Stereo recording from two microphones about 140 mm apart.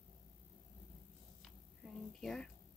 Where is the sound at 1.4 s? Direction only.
5° left (ahead or behind).